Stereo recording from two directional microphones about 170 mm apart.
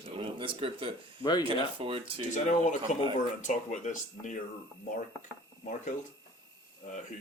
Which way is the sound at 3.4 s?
45° left (ahead or behind).